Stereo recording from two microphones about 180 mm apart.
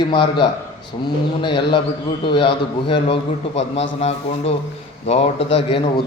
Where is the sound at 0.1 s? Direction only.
25° left (ahead or behind).